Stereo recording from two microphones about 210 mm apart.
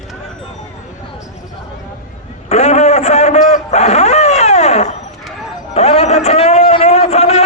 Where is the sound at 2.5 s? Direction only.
30° left (ahead or behind).